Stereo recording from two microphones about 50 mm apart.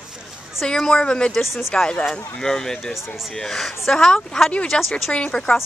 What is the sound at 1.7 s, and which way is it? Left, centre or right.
Speech, centre.